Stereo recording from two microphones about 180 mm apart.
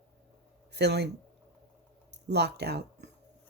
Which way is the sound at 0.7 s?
65° right (ahead or behind).